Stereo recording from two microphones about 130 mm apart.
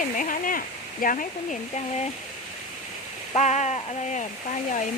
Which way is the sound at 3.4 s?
60° left (ahead or behind).